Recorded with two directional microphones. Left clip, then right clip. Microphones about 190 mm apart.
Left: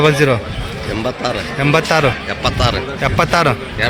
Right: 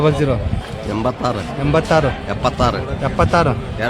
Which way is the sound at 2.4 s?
65° right (ahead or behind).